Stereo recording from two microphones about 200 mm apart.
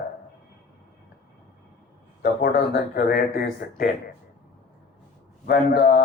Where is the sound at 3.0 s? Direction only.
50° left (ahead or behind).